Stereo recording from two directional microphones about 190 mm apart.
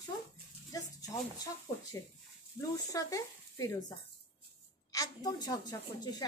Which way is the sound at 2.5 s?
15° left (ahead or behind).